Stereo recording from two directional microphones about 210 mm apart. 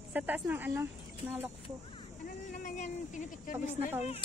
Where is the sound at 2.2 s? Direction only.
40° left (ahead or behind).